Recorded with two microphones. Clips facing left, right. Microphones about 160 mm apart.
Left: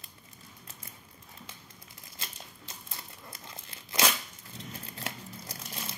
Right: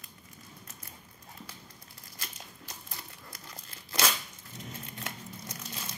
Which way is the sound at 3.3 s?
25° left (ahead or behind).